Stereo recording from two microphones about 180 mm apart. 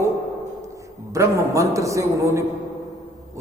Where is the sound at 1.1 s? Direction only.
15° right (ahead or behind).